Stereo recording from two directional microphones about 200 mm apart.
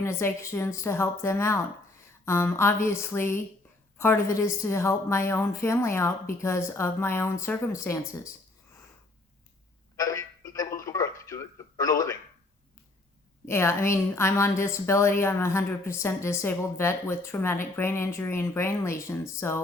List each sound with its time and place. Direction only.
0.0 s a woman's voice: 15° left (ahead or behind)
10.0 s telephone: 15° left (ahead or behind)
10.8 s a sound: 15° left (ahead or behind)
13.4 s a woman's voice: 10° left (ahead or behind)